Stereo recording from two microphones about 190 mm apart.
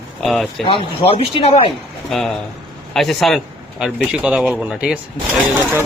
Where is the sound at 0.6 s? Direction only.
30° left (ahead or behind).